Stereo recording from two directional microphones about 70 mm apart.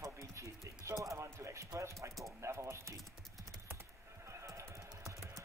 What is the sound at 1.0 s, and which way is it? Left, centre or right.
Music, right.